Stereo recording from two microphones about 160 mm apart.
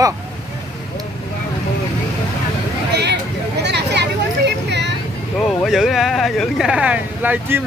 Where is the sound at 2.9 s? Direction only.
90° right.